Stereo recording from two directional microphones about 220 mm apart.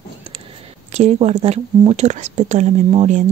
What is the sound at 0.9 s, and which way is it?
Speech, 30° right (ahead or behind).